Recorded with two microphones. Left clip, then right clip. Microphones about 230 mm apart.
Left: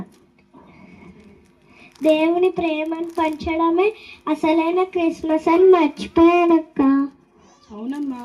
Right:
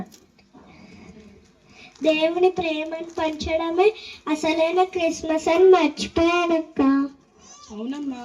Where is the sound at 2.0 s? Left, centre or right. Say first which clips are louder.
Left 2 dB; left.